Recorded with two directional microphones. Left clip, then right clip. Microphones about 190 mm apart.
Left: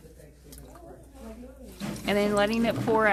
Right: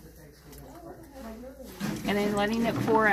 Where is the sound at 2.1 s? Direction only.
30° left (ahead or behind).